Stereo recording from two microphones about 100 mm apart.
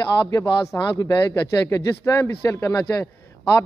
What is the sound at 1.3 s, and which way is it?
Speech, 30° left (ahead or behind).